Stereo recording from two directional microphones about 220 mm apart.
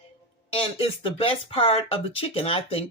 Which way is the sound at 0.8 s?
25° left (ahead or behind).